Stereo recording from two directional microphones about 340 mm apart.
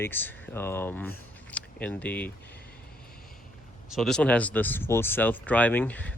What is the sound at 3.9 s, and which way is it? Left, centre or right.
Speech, centre.